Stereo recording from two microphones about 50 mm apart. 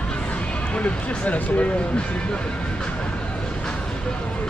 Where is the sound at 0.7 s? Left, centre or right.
Left.